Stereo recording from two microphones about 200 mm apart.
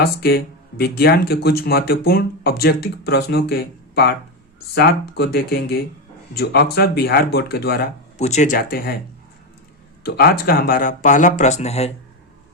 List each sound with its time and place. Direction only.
0.0 s speech: 50° left (ahead or behind)
8.2 s speech: 35° left (ahead or behind)
10.1 s speech: 50° left (ahead or behind); by 11.9 s 30° left (ahead or behind)